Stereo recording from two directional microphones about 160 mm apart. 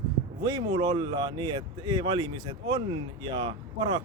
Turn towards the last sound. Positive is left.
turn(degrees=-30)  # may be behind; listen again after turning